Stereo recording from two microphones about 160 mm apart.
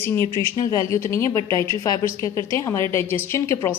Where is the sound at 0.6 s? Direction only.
20° left (ahead or behind).